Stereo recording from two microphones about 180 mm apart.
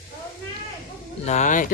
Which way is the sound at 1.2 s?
40° left (ahead or behind).